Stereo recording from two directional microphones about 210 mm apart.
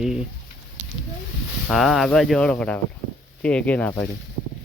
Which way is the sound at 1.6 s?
Centre (ahead or behind).